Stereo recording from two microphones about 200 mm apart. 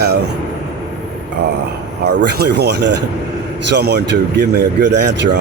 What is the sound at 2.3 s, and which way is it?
Speech, 55° right (ahead or behind).